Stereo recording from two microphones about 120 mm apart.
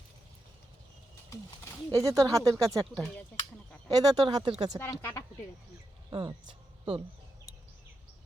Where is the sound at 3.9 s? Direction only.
35° right (ahead or behind).